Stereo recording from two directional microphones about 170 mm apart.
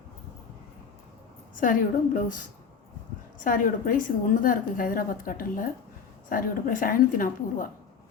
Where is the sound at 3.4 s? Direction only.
55° left (ahead or behind).